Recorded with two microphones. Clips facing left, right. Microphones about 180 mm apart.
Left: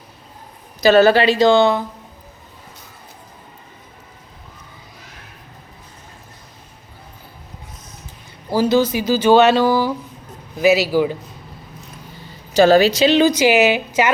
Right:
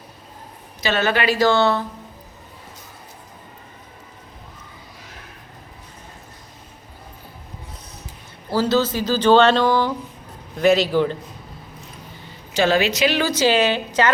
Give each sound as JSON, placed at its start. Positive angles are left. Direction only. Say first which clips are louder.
{"t": 0.8, "sound": "a woman's voice", "louder": "left 9 dB", "side_deg": 40}
{"t": 8.4, "sound": "speech", "louder": "left 3 dB", "side_deg": 15}
{"t": 12.5, "sound": "speech", "louder": "left 7 dB", "side_deg": 40}